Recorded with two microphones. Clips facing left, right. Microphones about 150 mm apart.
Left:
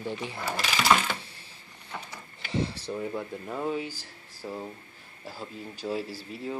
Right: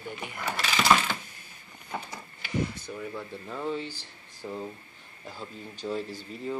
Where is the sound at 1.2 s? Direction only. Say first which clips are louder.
Left 1 dB; 30° left (ahead or behind).